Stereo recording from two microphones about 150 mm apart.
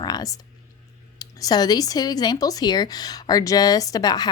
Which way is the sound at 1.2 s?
25° left (ahead or behind).